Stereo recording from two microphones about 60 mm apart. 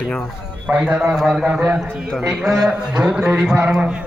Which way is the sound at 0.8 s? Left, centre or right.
Centre.